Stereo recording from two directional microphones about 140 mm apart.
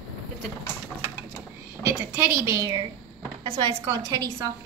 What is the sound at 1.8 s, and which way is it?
A woman's voice, 15° right (ahead or behind).